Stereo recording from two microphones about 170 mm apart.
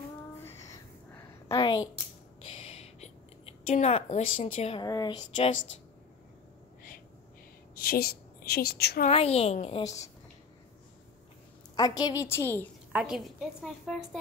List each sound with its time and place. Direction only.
0.4 s a sound: 15° left (ahead or behind)
1.5 s a woman's voice: 25° left (ahead or behind)
2.5 s a sound: 35° left (ahead or behind)
4.8 s a woman's voice: 25° left (ahead or behind)
7.7 s a woman's voice: 65° left (ahead or behind)
9.1 s a woman's voice: 35° left (ahead or behind)
11.7 s a woman's voice: 25° left (ahead or behind)
12.9 s a woman's voice: 5° right (ahead or behind)